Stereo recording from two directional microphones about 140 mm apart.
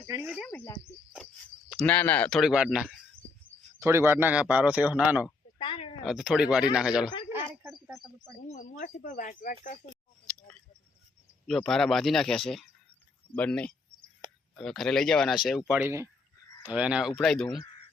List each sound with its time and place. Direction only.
0.2 s speech: 5° right (ahead or behind)
0.5 s speech: 15° left (ahead or behind)
1.9 s speech: 10° left (ahead or behind)
2.4 s speech: 5° right (ahead or behind)
3.8 s speech: 20° right (ahead or behind)
5.5 s a sound: 40° left (ahead or behind)
6.1 s speech: 5° right (ahead or behind)
7.7 s a sound: centre (ahead or behind)
8.8 s speech: 70° left (ahead or behind)
11.4 s speech: 5° left (ahead or behind)
15.8 s speech: 20° right (ahead or behind)
16.6 s speech: 10° right (ahead or behind)